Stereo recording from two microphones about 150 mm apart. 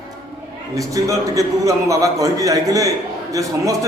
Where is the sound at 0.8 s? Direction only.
20° right (ahead or behind).